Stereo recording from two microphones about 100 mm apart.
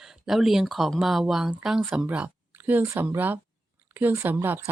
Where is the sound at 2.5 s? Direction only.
20° right (ahead or behind).